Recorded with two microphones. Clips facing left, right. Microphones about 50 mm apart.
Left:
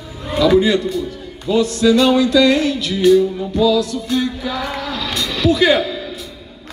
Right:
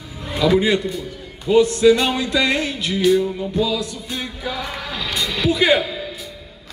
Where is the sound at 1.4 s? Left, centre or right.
Right.